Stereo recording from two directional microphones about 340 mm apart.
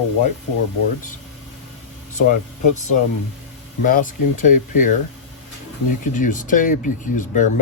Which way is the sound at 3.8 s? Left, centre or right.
Left.